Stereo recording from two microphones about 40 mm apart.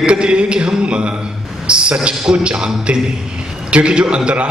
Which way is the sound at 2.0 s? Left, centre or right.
Right.